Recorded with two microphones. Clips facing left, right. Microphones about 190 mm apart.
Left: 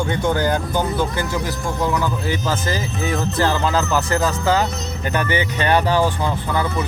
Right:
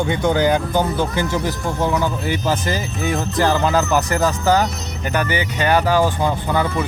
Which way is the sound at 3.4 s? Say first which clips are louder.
Right 3 dB; 15° right (ahead or behind).